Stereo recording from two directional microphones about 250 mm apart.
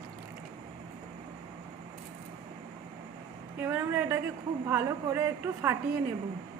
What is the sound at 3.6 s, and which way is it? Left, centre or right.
A woman's voice, centre.